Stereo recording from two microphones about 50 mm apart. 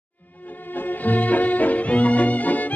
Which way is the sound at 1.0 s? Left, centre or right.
Left.